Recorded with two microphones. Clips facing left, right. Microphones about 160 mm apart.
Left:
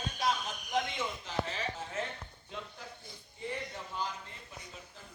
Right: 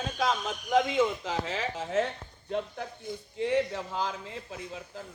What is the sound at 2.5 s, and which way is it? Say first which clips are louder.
Speech: right 13 dB; 60° right (ahead or behind).